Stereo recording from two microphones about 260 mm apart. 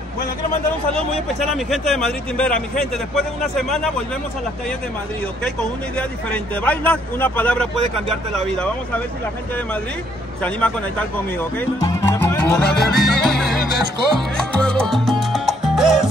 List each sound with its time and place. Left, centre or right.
0.9 s a man's voice: centre
5.4 s a man's voice: centre
10.4 s speech: centre
14.3 s salsa music: centre